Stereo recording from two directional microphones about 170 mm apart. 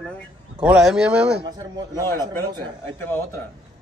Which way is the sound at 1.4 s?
25° right (ahead or behind).